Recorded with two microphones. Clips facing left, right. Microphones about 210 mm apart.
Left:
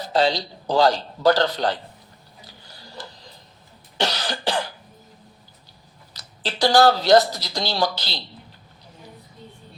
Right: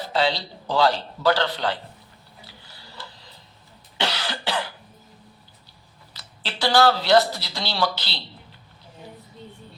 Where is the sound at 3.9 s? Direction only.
40° left (ahead or behind).